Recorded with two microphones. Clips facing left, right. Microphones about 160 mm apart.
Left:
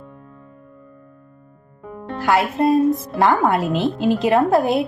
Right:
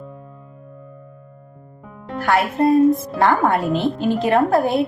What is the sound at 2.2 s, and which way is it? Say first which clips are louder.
A woman's voice: even; 20° left (ahead or behind).